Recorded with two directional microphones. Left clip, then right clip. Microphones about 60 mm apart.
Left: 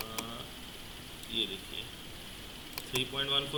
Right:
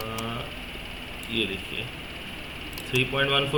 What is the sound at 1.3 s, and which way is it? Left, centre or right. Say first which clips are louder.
Speech: right 6 dB; left.